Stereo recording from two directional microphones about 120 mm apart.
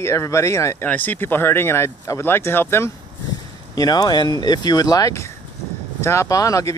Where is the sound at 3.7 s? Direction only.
30° left (ahead or behind).